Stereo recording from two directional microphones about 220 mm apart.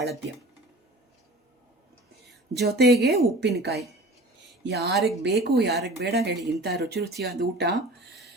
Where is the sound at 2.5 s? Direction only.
50° right (ahead or behind).